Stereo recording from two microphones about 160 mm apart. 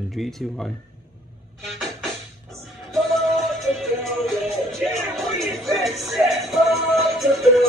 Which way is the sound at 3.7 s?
Centre (ahead or behind).